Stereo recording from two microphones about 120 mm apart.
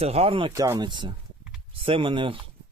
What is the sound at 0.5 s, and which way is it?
Speech, 25° right (ahead or behind).